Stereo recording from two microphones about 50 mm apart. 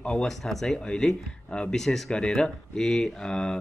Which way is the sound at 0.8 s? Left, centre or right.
Centre.